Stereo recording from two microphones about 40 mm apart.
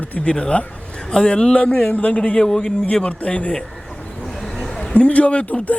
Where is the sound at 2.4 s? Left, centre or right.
Centre.